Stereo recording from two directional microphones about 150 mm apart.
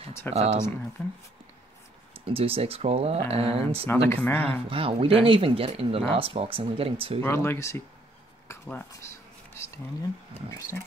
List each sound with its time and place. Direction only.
0.3 s speech: 45° right (ahead or behind)
1.0 s speech: 10° left (ahead or behind)
2.2 s speech: 40° right (ahead or behind)
3.8 s speech: 15° left (ahead or behind)
4.5 s speech: 35° right (ahead or behind)
7.2 s speech: 15° left (ahead or behind)
8.6 s a sound: 15° left (ahead or behind)